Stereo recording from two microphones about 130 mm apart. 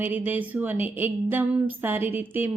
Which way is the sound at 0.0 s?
15° right (ahead or behind).